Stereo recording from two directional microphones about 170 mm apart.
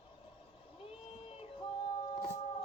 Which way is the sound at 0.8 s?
35° left (ahead or behind).